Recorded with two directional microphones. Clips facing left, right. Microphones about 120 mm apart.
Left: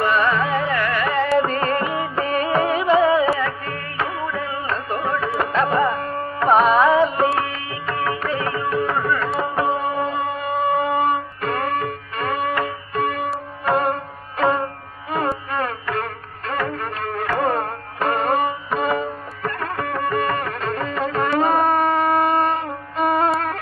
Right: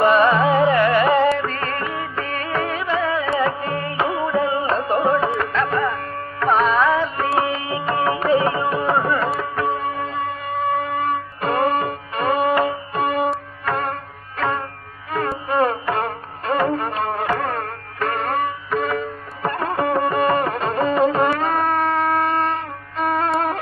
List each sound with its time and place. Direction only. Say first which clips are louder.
0.0 s music: right 4 dB; 20° right (ahead or behind)
1.4 s music: left 4 dB; 15° left (ahead or behind)
3.3 s music: right 5 dB; 20° right (ahead or behind)
5.4 s music: left 2 dB; 15° left (ahead or behind)
7.3 s music: right 4 dB; 25° right (ahead or behind)
9.4 s shofar: left 2 dB; 15° left (ahead or behind)
11.4 s music: right 5 dB; 20° right (ahead or behind)
13.7 s sitar: left 4 dB; 15° left (ahead or behind)
14.4 s music: left 4 dB; 15° left (ahead or behind)
15.5 s music: right 5 dB; 25° right (ahead or behind)
17.4 s music: left 4 dB; 15° left (ahead or behind)
19.4 s music: right 5 dB; 20° right (ahead or behind)
21.3 s a sound: left 2 dB; 15° left (ahead or behind)
21.7 s music: left 1 dB; 5° left (ahead or behind)